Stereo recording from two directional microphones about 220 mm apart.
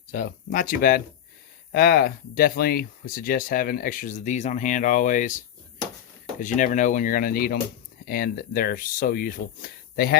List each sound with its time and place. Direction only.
0.1 s speech: 35° left (ahead or behind)
6.4 s speech: 35° left (ahead or behind)